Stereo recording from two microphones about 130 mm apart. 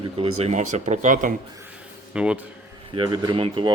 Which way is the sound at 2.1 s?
10° right (ahead or behind).